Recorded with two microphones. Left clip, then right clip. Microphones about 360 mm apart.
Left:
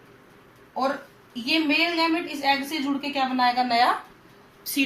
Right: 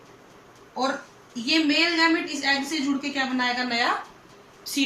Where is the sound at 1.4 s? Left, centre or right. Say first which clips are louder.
Right 1 dB; centre.